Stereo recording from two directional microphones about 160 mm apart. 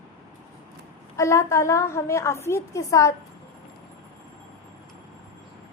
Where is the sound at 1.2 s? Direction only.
20° left (ahead or behind).